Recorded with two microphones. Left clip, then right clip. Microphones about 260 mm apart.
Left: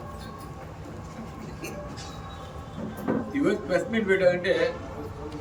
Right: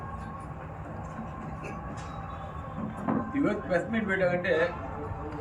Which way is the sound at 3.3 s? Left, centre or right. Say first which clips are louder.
Left 4 dB; centre.